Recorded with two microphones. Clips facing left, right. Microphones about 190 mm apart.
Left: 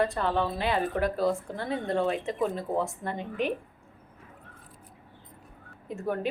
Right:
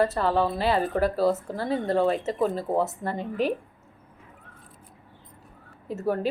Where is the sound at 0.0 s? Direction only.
5° right (ahead or behind).